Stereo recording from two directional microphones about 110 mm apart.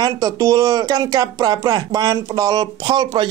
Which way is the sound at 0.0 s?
30° right (ahead or behind).